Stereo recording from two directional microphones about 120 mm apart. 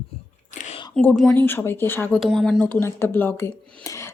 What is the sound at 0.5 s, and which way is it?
Whispering, 90° left.